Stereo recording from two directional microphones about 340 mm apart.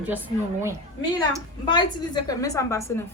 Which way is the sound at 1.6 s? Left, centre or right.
Centre.